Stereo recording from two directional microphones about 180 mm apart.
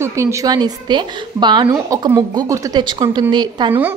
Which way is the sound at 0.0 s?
15° right (ahead or behind).